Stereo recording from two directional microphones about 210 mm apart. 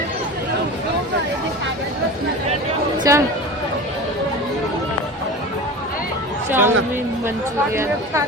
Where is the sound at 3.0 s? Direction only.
15° right (ahead or behind).